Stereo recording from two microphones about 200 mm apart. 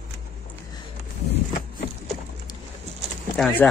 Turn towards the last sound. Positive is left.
turn(degrees=5)  # may be behind; listen again after turning